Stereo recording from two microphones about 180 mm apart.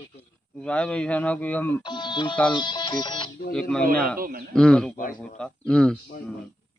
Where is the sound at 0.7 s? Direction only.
5° left (ahead or behind).